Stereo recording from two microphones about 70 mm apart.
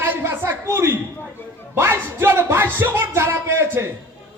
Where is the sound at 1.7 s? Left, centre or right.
Right.